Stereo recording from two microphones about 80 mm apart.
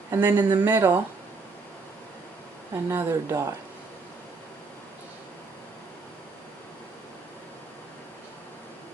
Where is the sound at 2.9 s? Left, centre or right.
Right.